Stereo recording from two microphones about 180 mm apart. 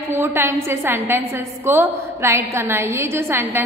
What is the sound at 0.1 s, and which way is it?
A woman's voice, 15° right (ahead or behind).